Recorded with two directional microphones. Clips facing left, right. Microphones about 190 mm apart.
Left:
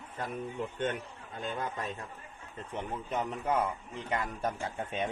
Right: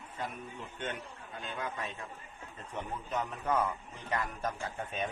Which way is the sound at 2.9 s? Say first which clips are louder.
Left 2 dB; 25° left (ahead or behind).